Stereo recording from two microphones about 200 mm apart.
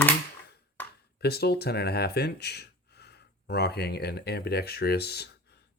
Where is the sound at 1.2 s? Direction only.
50° left (ahead or behind).